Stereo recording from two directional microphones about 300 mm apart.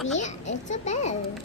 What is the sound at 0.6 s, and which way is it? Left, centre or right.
Speech, left.